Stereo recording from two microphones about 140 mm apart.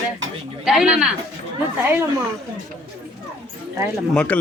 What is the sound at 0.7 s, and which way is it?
Speech, 5° right (ahead or behind).